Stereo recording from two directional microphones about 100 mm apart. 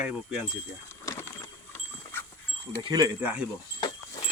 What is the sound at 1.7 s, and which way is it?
Dog, 20° left (ahead or behind).